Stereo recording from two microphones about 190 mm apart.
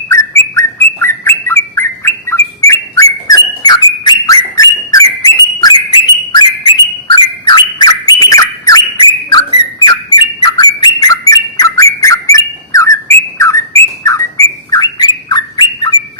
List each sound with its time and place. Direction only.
0.1 s bird: 15° left (ahead or behind)
9.8 s bird: 25° left (ahead or behind)